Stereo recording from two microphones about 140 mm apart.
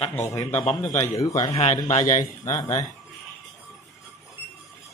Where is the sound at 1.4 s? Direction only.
50° left (ahead or behind).